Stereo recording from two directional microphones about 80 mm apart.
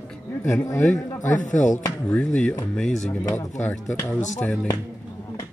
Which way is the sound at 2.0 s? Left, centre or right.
Centre.